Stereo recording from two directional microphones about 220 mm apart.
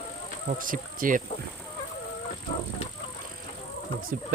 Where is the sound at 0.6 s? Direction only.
40° right (ahead or behind).